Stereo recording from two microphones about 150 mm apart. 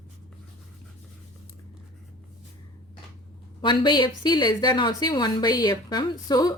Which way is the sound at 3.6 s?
30° left (ahead or behind).